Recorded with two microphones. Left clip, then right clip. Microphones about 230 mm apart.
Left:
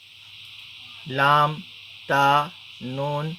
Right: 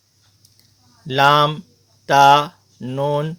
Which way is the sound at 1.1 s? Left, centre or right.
Right.